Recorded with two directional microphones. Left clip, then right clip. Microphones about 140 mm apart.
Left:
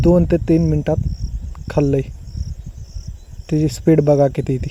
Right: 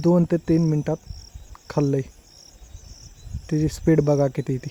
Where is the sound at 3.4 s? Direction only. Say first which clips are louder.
Left 5 dB; 20° left (ahead or behind).